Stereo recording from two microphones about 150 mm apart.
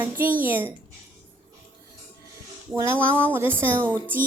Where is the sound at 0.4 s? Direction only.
10° right (ahead or behind).